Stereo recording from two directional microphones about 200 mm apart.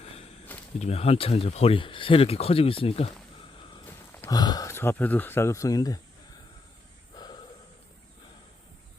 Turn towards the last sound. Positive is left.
turn(degrees=20)  # may be behind; listen again after turning